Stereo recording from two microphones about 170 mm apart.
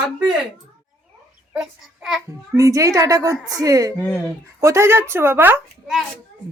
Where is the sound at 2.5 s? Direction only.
20° right (ahead or behind).